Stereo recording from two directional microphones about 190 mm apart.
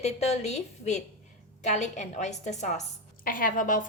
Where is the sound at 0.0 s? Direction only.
35° left (ahead or behind).